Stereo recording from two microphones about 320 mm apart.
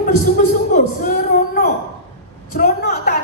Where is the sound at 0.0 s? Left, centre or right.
Left.